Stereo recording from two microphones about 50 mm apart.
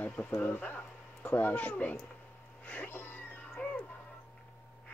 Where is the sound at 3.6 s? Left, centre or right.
Left.